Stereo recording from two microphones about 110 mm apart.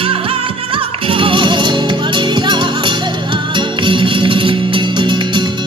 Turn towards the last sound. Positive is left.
turn(degrees=-45)  # may be behind; listen again after turning